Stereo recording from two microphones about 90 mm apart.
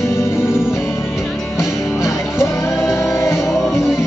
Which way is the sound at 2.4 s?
30° left (ahead or behind).